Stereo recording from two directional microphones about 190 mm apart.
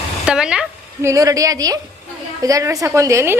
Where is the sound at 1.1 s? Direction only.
20° right (ahead or behind).